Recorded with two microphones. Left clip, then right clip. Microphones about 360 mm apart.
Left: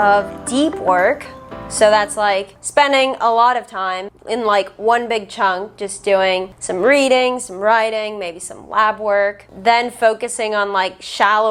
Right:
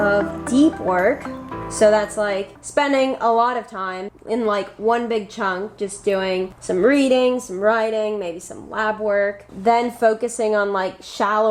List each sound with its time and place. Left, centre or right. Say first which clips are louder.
0.0 s a woman's voice: left 5 dB; left